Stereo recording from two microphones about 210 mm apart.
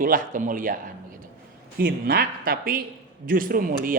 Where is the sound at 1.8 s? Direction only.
45° right (ahead or behind).